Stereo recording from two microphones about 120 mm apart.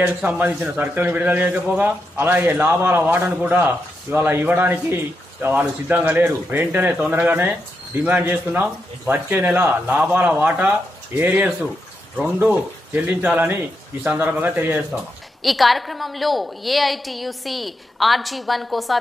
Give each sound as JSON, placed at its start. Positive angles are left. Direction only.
{"t": 0.0, "sound": "a man's voice", "side_deg": -15}
{"t": 15.4, "sound": "a woman's voice", "side_deg": 0}